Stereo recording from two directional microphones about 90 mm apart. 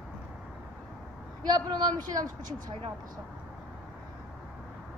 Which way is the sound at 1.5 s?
50° right (ahead or behind).